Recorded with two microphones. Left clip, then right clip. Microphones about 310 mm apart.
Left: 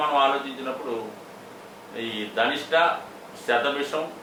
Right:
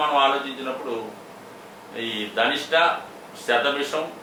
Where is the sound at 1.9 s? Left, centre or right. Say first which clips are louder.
Right 2 dB; centre.